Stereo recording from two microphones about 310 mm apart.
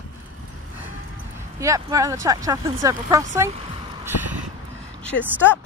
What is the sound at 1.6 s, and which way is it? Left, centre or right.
Speech, centre.